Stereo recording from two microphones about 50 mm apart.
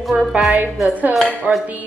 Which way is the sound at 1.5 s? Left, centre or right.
Right.